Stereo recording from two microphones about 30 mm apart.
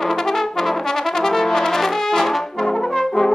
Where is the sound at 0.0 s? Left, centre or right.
Centre.